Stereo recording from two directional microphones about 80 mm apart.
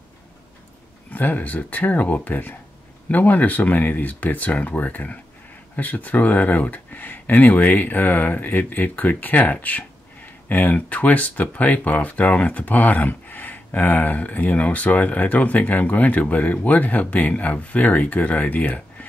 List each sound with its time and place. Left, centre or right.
1.1 s speech: left